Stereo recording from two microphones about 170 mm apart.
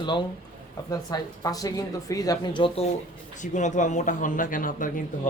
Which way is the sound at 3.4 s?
45° left (ahead or behind).